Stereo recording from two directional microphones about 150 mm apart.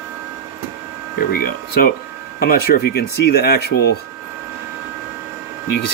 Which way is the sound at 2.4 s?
90° left.